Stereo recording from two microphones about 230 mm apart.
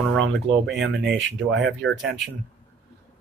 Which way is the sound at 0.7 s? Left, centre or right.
Right.